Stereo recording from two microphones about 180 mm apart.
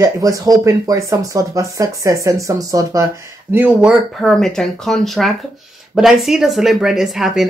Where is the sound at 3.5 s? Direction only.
5° right (ahead or behind).